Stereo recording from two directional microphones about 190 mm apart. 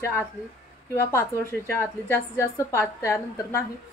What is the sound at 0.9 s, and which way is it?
A woman's voice, 15° left (ahead or behind).